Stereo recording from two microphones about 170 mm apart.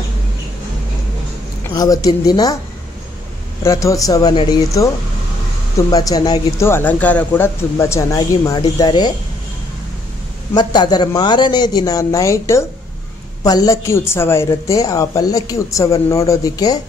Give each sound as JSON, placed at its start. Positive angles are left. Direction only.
{"t": 1.8, "sound": "a woman's voice", "side_deg": 20}
{"t": 3.6, "sound": "a woman's voice", "side_deg": 15}
{"t": 5.9, "sound": "a woman's voice", "side_deg": 20}
{"t": 10.5, "sound": "a woman's voice", "side_deg": 25}